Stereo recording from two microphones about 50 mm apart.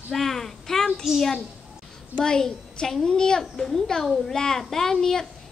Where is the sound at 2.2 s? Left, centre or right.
Centre.